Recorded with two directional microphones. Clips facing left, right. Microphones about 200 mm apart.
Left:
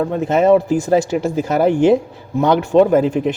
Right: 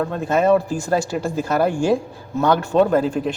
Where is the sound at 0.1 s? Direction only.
20° left (ahead or behind).